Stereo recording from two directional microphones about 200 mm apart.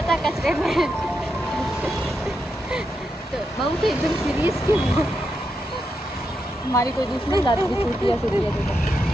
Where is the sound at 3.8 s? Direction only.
Centre (ahead or behind).